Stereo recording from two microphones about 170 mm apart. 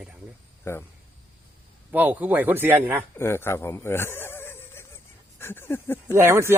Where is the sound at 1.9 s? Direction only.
10° right (ahead or behind).